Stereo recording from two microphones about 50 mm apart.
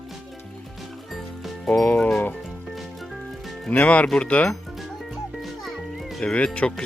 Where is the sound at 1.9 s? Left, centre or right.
Left.